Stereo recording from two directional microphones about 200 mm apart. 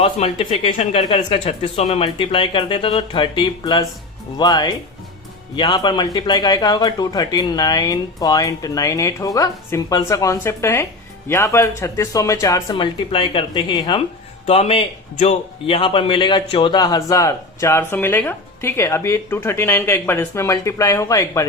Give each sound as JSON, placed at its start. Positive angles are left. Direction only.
{"t": 0.0, "sound": "a man's voice", "side_deg": 30}